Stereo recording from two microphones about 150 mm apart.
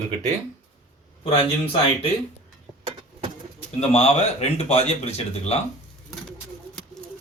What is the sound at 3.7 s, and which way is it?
Speech, 45° left (ahead or behind).